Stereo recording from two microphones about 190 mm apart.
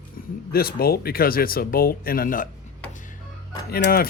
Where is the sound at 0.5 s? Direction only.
55° left (ahead or behind).